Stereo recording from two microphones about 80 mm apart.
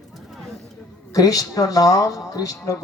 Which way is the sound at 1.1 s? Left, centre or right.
Left.